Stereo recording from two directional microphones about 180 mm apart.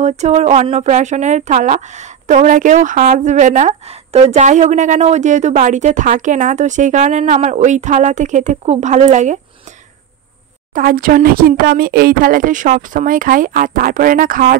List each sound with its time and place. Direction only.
0.2 s speech: 40° right (ahead or behind)
10.7 s speech: 55° right (ahead or behind)